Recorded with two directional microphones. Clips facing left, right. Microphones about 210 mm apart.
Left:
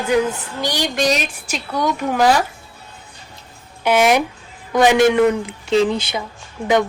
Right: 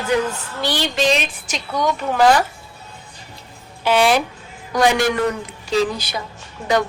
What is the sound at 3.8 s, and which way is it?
A woman's voice, 15° left (ahead or behind).